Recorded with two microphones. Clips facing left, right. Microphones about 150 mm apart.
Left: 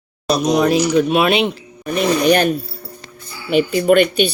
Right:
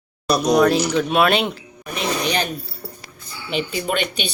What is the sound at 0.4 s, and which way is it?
Speech, 10° left (ahead or behind).